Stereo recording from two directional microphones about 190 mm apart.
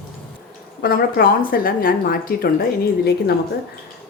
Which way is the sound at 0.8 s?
50° left (ahead or behind).